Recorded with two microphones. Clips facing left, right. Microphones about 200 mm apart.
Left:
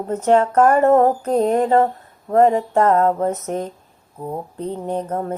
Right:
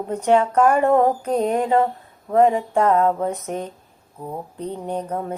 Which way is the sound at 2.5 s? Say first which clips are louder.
Left 3 dB; 40° left (ahead or behind).